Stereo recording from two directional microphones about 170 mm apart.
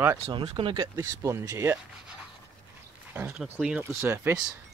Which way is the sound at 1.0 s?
15° right (ahead or behind).